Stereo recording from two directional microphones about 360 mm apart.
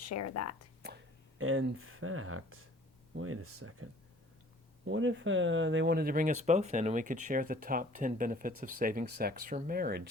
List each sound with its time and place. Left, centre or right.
0.0 s speech: left
1.4 s speech: right
4.9 s speech: right